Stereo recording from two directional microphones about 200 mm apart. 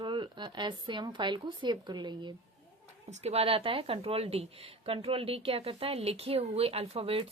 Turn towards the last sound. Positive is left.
turn(degrees=-30)  # may be behind; listen again after turning